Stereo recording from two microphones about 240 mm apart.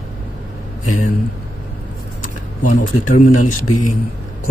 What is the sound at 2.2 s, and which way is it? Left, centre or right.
Speech, left.